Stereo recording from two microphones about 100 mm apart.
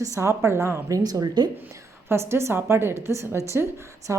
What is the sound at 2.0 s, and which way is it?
Speech, 25° right (ahead or behind).